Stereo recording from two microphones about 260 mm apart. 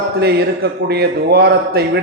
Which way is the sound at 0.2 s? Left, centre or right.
Right.